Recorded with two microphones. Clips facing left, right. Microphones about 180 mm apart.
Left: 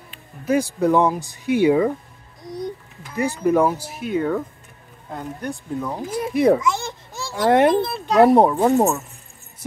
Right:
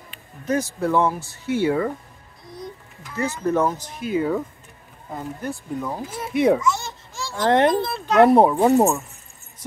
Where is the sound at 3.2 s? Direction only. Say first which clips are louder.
Left 3 dB; 10° left (ahead or behind).